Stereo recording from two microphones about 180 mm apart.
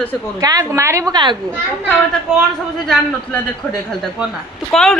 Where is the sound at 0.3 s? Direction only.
20° right (ahead or behind).